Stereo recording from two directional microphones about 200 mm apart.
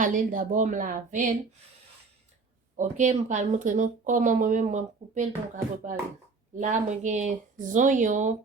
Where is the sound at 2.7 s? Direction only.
40° right (ahead or behind).